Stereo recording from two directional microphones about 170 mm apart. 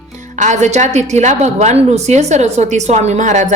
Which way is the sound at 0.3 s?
45° right (ahead or behind).